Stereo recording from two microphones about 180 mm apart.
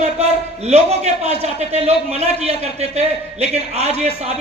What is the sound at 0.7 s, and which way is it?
A man's voice, 35° right (ahead or behind).